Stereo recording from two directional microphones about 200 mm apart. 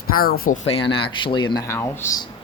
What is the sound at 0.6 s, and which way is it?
Speech, 30° left (ahead or behind).